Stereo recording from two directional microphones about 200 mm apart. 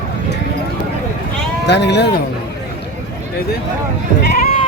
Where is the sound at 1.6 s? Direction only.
60° left (ahead or behind).